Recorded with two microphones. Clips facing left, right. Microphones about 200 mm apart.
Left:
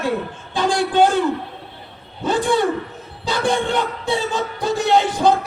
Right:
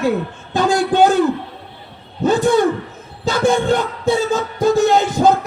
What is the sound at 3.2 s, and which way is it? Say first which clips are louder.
Music: right 5 dB; 45° right (ahead or behind).